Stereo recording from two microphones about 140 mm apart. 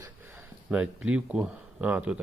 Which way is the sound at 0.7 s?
10° right (ahead or behind).